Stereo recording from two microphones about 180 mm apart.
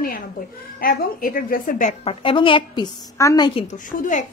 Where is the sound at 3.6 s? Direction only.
45° left (ahead or behind).